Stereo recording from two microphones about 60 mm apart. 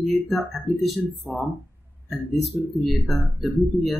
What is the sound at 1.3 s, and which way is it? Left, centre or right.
Speech, left.